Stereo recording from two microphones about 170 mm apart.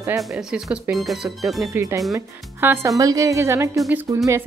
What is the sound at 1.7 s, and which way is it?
Speech, 15° right (ahead or behind).